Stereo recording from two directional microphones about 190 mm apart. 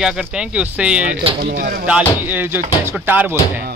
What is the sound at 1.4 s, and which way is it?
Speech, 50° right (ahead or behind).